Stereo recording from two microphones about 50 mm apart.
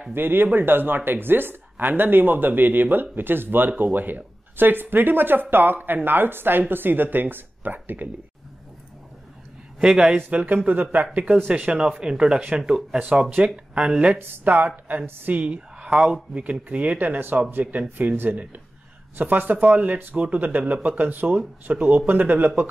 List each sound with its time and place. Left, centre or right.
0.1 s speech: right
9.8 s a man's voice: centre
10.1 s speech: right
14.1 s speech: right
15.3 s a woman's voice: right
15.9 s speech: centre
16.6 s speech: right